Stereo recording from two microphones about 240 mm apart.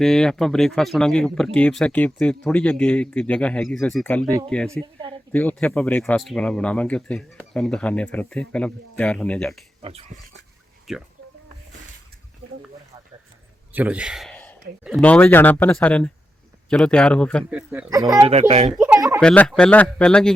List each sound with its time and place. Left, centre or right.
0.0 s speech: centre
10.9 s speech: centre
13.7 s speech: centre
17.5 s speech: centre; by 18.7 s right
18.9 s a sound: centre
19.2 s speech: centre